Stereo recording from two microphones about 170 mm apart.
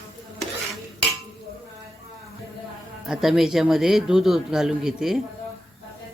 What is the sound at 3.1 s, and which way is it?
Speech, centre (ahead or behind).